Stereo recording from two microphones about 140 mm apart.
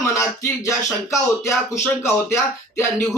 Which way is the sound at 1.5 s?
20° left (ahead or behind).